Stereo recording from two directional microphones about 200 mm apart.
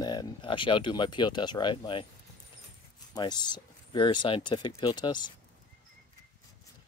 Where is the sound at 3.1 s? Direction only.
20° left (ahead or behind).